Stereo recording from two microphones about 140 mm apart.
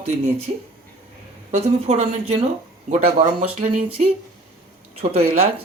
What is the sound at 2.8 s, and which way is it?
Speech, 60° right (ahead or behind).